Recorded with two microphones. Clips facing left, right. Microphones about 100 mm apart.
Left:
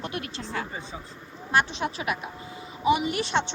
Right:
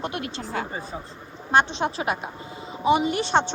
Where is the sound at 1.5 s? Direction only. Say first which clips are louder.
Right 4 dB; 30° right (ahead or behind).